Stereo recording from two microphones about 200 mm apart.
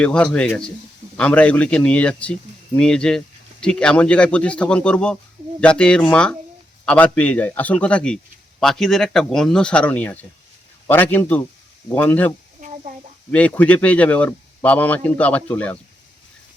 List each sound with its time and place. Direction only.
0.0 s a man's voice: 5° left (ahead or behind)
12.6 s a sound: 40° right (ahead or behind)
13.3 s a man's voice: 5° left (ahead or behind)